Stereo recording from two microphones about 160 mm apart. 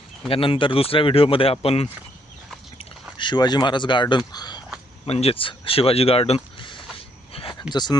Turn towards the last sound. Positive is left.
turn(degrees=25)  # may be behind; listen again after turning